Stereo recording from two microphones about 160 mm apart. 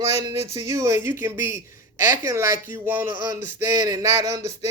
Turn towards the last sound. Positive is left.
turn(degrees=-20)  # may be behind; listen again after turning